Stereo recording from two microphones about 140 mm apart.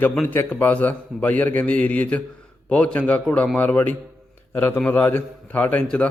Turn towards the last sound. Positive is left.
turn(degrees=10)  # may be behind; listen again after turning